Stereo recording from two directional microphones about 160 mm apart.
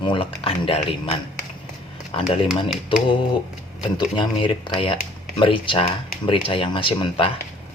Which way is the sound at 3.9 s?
30° left (ahead or behind).